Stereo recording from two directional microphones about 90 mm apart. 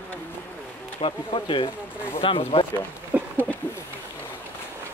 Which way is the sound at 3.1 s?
20° right (ahead or behind).